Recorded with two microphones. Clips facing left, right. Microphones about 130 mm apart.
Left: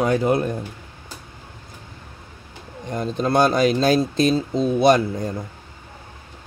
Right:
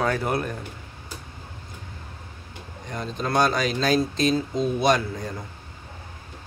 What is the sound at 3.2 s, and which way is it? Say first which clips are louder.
Speech: left 5 dB; 30° left (ahead or behind).